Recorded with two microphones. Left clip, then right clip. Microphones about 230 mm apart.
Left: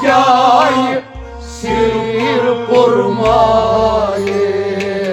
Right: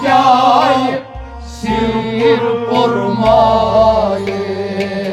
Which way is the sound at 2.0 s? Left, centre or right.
Left.